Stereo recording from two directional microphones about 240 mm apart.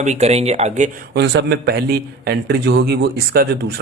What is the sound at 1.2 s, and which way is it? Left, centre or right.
Speech, right.